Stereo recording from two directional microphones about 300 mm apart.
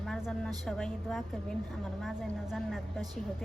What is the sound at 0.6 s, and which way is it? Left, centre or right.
A woman's voice, centre.